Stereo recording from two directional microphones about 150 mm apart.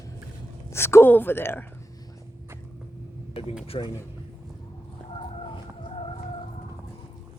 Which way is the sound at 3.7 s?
35° left (ahead or behind).